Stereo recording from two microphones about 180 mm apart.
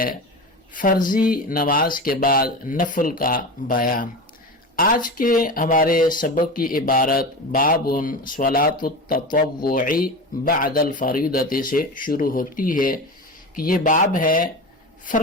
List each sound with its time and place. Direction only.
0.7 s a woman's voice: 50° left (ahead or behind)